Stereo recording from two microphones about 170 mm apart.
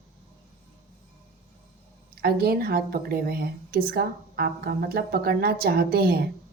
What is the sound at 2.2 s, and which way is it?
Speech, 65° right (ahead or behind).